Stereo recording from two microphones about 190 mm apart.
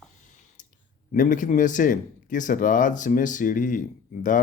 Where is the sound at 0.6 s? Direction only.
40° left (ahead or behind).